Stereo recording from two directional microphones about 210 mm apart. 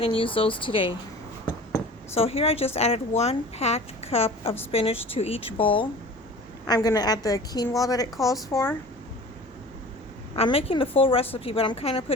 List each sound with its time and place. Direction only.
0.0 s a woman's voice: 25° left (ahead or behind)
2.1 s a woman's voice: 30° left (ahead or behind)
10.3 s a woman's voice: 30° left (ahead or behind)